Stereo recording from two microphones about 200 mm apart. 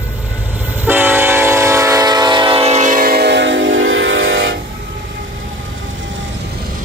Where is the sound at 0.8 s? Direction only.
10° right (ahead or behind); by 4.6 s 65° right (ahead or behind).